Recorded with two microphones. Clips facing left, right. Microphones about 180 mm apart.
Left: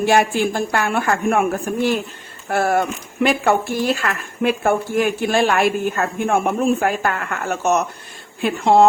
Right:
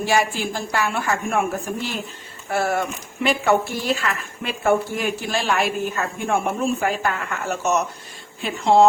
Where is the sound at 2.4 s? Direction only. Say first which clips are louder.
Left 4 dB; 55° left (ahead or behind).